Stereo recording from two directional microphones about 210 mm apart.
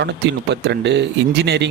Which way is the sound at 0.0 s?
55° right (ahead or behind).